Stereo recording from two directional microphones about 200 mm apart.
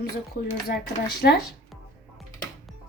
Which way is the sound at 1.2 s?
50° left (ahead or behind).